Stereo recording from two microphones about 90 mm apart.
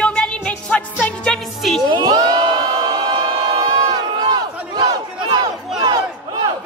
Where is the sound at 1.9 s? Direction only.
45° right (ahead or behind).